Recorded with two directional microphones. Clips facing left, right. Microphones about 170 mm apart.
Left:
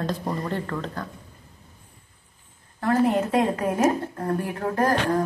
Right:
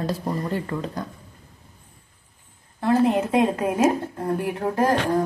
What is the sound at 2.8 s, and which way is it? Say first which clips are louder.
A woman's voice: right 2 dB; 15° right (ahead or behind).